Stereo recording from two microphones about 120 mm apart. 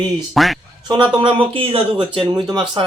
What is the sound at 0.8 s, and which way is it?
Speech, 40° right (ahead or behind).